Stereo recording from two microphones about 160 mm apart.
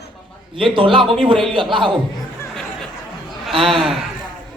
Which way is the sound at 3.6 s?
Centre (ahead or behind).